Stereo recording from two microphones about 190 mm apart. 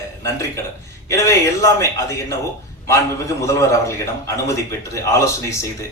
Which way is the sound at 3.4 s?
15° left (ahead or behind).